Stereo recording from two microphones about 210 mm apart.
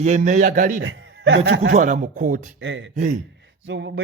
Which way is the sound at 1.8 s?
40° right (ahead or behind).